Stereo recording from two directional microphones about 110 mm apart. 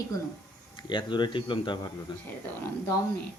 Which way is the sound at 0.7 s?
45° left (ahead or behind).